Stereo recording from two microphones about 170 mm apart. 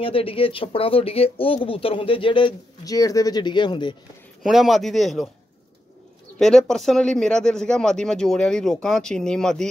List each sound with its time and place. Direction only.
0.0 s speech: 30° left (ahead or behind)
4.4 s speech: centre (ahead or behind)
6.3 s speech: 5° left (ahead or behind)